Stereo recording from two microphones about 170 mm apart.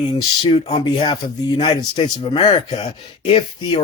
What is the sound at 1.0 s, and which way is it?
Speech, 25° left (ahead or behind).